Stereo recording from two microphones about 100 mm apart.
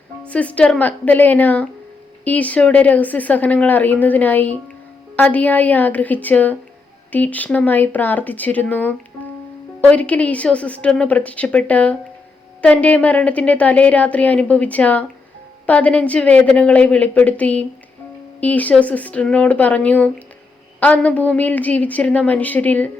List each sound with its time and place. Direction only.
0.3 s a woman's voice: 15° left (ahead or behind)